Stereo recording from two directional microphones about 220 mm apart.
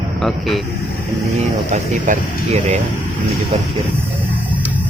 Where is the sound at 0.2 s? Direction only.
Centre (ahead or behind).